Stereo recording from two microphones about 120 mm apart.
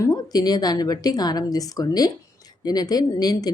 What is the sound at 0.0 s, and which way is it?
A woman's voice, 30° left (ahead or behind).